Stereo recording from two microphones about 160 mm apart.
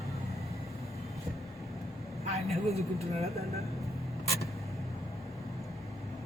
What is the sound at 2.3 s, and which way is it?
Speech, 40° right (ahead or behind).